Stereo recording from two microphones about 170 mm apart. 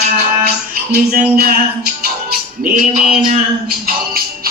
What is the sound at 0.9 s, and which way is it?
Music, 60° right (ahead or behind).